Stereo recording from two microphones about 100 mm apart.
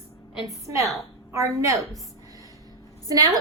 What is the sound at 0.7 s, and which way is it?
A woman's voice, 30° right (ahead or behind).